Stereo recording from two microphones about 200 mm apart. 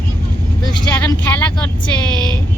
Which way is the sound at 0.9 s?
10° left (ahead or behind).